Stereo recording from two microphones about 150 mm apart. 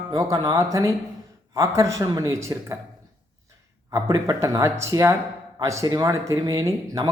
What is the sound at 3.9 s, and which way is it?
Speech, 20° right (ahead or behind).